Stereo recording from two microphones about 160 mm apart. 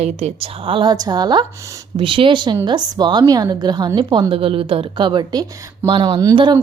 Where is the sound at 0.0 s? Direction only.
40° right (ahead or behind).